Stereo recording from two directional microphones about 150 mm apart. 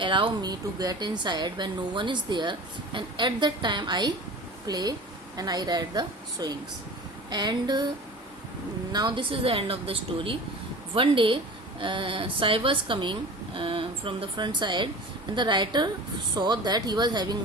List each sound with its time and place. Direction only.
0.0 s a woman's voice: 35° right (ahead or behind)
8.9 s a woman's voice: 30° right (ahead or behind)